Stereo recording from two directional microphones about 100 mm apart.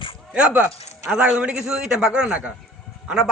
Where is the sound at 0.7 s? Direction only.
90° left.